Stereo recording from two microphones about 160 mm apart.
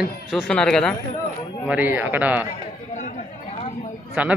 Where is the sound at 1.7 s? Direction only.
10° right (ahead or behind).